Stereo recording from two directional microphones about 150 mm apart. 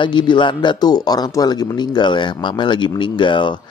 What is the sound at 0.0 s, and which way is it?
Speech, 30° left (ahead or behind).